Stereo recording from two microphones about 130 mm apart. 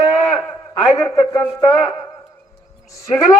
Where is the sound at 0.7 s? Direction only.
30° left (ahead or behind).